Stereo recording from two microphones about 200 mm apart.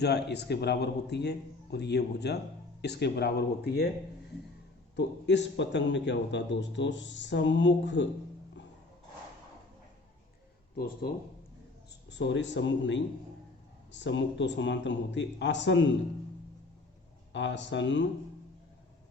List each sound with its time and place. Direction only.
0.0 s speech: 55° left (ahead or behind)
4.9 s speech: 60° left (ahead or behind)
10.8 s speech: 50° left (ahead or behind)
12.0 s speech: 60° left (ahead or behind)
17.3 s speech: 65° left (ahead or behind)